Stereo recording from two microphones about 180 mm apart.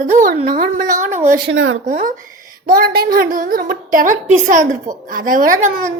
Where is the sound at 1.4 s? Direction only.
90° right.